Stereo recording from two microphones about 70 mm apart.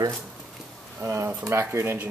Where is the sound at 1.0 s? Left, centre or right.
Right.